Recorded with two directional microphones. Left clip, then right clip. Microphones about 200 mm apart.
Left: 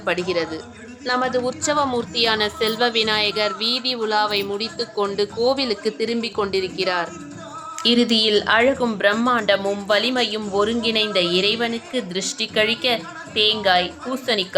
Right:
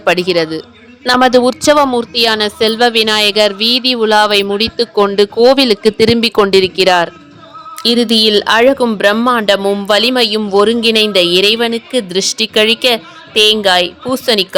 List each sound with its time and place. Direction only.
0.0 s speech: 45° right (ahead or behind)